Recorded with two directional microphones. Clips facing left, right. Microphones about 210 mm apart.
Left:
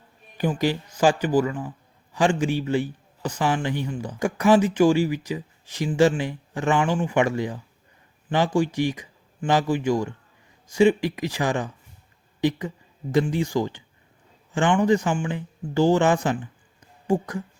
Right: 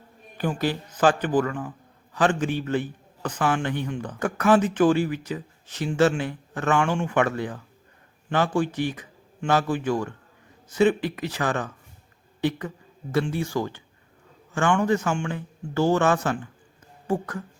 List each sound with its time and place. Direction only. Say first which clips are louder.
0.6 s speech: left 1 dB; 10° left (ahead or behind)